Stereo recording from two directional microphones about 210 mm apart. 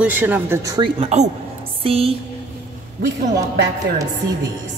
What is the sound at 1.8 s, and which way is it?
Music, 25° right (ahead or behind).